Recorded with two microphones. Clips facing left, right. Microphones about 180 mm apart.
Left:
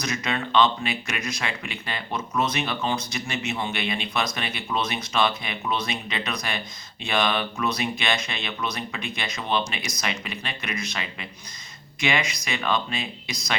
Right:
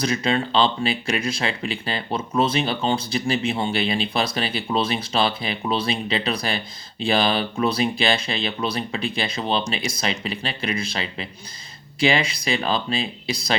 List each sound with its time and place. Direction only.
0.0 s speech: 30° right (ahead or behind)